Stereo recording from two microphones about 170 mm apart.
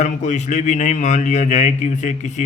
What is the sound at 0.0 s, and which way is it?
A man's voice, 45° left (ahead or behind).